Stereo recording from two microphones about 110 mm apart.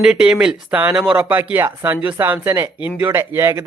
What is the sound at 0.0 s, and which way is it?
A man's voice, 5° right (ahead or behind).